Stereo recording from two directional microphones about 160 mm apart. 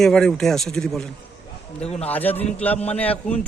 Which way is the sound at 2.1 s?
10° left (ahead or behind).